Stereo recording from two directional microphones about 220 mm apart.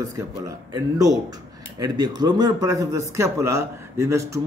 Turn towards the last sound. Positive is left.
turn(degrees=-15)  # may be behind; listen again after turning